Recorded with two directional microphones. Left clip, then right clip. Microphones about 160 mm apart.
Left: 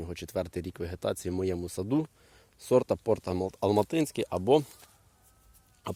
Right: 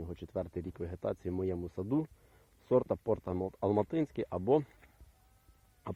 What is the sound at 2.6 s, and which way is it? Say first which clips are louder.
Speech: left 5 dB; 60° left (ahead or behind).